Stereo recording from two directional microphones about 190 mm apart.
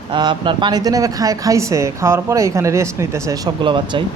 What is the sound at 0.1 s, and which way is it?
Speech, 25° right (ahead or behind).